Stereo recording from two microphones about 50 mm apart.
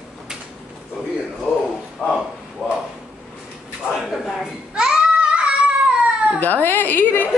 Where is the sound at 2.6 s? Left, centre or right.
Centre.